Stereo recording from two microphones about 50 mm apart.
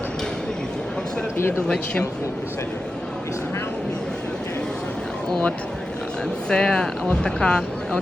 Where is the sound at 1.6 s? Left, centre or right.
Centre.